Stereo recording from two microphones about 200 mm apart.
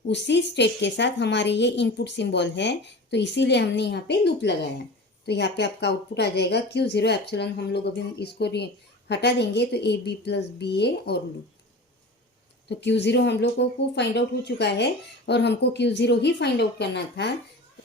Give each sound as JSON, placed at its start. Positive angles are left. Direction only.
{"t": 0.1, "sound": "a woman's voice", "side_deg": 60}
{"t": 12.6, "sound": "a woman's voice", "side_deg": 60}